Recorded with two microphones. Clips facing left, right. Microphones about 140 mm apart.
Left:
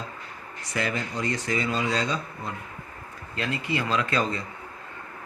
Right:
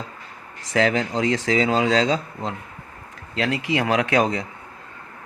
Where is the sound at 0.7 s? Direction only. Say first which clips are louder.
Right 9 dB; 90° right.